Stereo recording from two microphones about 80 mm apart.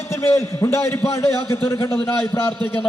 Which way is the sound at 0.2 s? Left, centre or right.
Left.